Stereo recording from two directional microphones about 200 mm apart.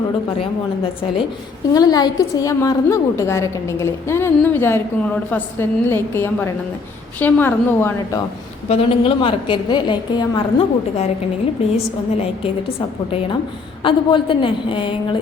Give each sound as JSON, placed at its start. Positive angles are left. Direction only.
{"t": 1.7, "sound": "a woman's voice", "side_deg": 20}
{"t": 8.7, "sound": "a woman's voice", "side_deg": 30}
{"t": 13.8, "sound": "a woman's voice", "side_deg": 25}